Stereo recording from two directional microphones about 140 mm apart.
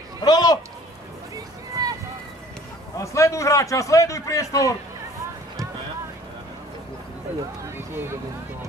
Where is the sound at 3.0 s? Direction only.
20° left (ahead or behind).